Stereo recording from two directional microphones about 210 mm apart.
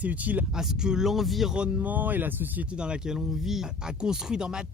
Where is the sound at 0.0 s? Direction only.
5° right (ahead or behind).